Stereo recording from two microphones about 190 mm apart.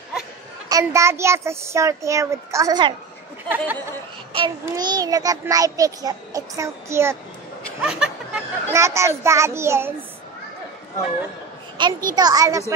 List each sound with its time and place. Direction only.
0.7 s a child's voice: 15° right (ahead or behind)
3.4 s a child's voice: 10° right (ahead or behind)
4.3 s child singing: 25° right (ahead or behind)
7.8 s a sound: 5° right (ahead or behind)
8.7 s a child's voice: 15° right (ahead or behind)
11.8 s child singing: 20° right (ahead or behind)